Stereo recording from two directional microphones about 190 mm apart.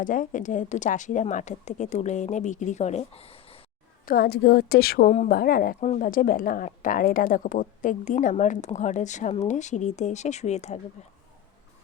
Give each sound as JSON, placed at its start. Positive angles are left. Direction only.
{"t": 0.0, "sound": "a woman's voice", "side_deg": 45}
{"t": 4.0, "sound": "a woman's voice", "side_deg": 50}